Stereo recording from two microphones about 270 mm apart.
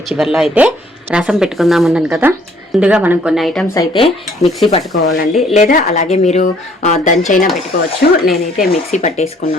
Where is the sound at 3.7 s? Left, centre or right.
Centre.